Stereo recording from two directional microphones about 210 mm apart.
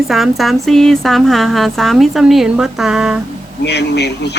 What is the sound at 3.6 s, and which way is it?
Speech, 55° left (ahead or behind).